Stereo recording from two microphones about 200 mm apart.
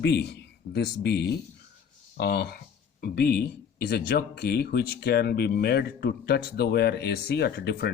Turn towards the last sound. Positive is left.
turn(degrees=55)  # may be behind; listen again after turning